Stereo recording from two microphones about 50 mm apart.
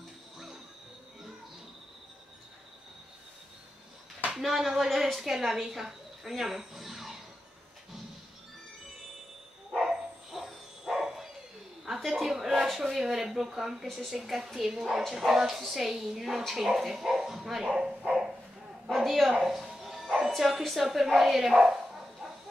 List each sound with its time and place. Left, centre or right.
4.4 s a woman's voice: centre
9.8 s bow-wow: centre
12.0 s a sound: centre
12.6 s a woman's voice: centre
18.9 s a woman's voice: centre